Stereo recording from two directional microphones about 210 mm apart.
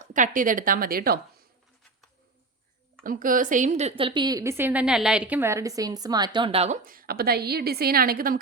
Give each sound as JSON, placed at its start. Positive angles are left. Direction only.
{"t": 0.0, "sound": "a woman's voice", "side_deg": -40}
{"t": 3.0, "sound": "a woman's voice", "side_deg": -40}
{"t": 6.8, "sound": "a woman's voice", "side_deg": -40}